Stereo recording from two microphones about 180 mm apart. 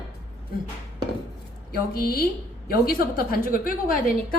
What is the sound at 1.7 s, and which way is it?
A woman's voice, 55° left (ahead or behind).